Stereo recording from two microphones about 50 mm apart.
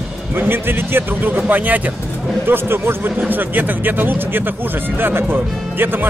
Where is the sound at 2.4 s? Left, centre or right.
Right.